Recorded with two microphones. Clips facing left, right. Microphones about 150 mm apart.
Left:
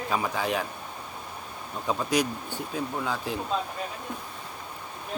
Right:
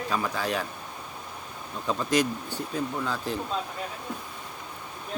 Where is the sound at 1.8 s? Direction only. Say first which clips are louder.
Right 1 dB; 10° left (ahead or behind).